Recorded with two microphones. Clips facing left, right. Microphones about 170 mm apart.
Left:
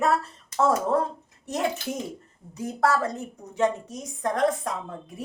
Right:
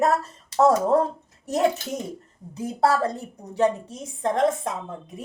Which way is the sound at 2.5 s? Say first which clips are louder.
Right 2 dB; 30° right (ahead or behind).